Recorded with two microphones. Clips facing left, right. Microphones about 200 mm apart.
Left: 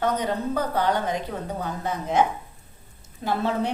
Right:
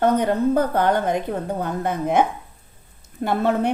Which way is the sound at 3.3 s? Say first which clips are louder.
Right 4 dB; 55° right (ahead or behind).